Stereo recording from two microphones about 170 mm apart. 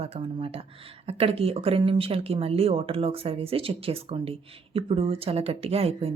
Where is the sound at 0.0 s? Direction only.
35° right (ahead or behind).